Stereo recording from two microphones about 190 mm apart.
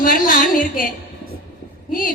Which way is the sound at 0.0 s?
45° left (ahead or behind).